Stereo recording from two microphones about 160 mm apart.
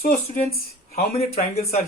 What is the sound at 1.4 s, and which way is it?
Speech, 40° left (ahead or behind).